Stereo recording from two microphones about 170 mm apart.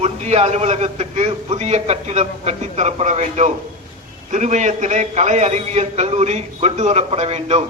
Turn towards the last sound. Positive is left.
turn(degrees=-35)  # may be behind; listen again after turning